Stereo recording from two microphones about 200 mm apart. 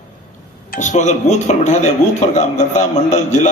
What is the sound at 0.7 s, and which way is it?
A man's voice, 40° left (ahead or behind).